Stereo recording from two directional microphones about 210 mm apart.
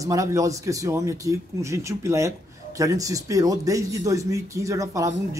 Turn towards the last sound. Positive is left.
turn(degrees=-15)  # may be behind; listen again after turning